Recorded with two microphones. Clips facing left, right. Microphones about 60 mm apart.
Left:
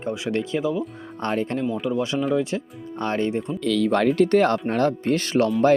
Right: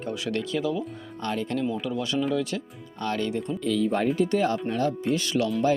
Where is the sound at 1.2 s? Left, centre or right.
Left.